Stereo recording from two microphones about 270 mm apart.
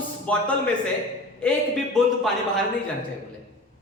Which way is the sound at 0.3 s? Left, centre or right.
Centre.